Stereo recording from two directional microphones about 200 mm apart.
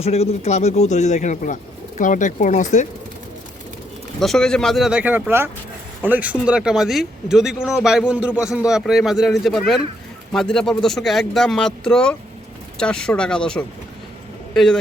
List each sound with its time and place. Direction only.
0.0 s a man's voice: 30° left (ahead or behind)
4.2 s a man's voice: centre (ahead or behind)